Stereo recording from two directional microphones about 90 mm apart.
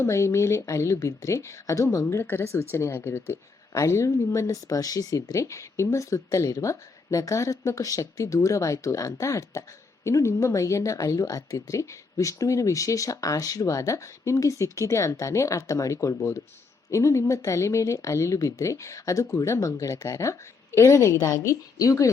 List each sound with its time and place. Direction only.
0.0 s speech: 35° left (ahead or behind)